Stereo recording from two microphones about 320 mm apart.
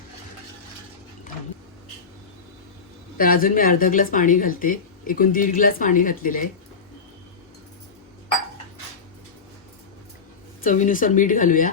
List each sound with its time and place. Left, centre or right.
3.2 s speech: left
10.6 s speech: left